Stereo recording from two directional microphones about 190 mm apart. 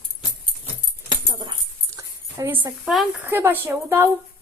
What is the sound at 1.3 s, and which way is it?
Dog, 25° right (ahead or behind).